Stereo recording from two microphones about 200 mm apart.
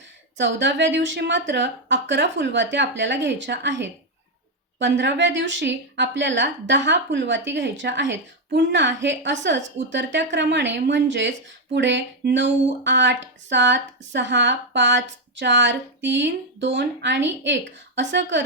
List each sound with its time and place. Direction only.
0.3 s a woman's voice: 65° right (ahead or behind)